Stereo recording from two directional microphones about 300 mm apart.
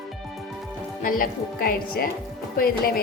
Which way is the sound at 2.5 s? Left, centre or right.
Left.